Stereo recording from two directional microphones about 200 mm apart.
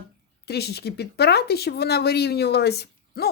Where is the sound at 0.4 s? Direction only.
55° left (ahead or behind).